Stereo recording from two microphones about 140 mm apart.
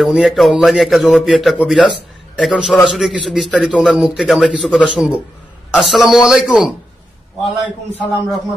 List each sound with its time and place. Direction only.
0.0 s a man's voice: centre (ahead or behind)